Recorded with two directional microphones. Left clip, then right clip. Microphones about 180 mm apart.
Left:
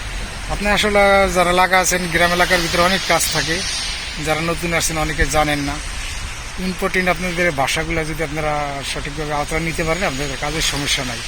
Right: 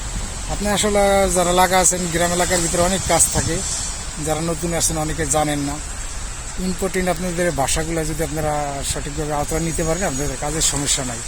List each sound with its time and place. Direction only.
0.6 s speech: 15° right (ahead or behind)
4.3 s speech: 10° right (ahead or behind)
6.9 s speech: 20° right (ahead or behind)
7.6 s speech: 25° right (ahead or behind)